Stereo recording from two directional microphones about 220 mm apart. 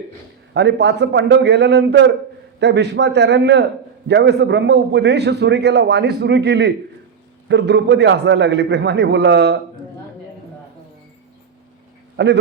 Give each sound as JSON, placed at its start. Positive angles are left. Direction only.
{"t": 0.5, "sound": "a man's voice", "side_deg": -50}
{"t": 12.1, "sound": "speech", "side_deg": -50}